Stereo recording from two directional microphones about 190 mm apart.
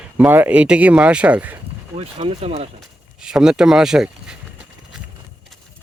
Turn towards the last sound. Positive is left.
turn(degrees=-5)  # may be behind; listen again after turning